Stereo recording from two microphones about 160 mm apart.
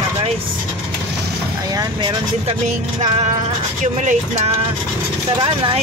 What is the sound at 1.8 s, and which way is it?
Speech, 25° right (ahead or behind).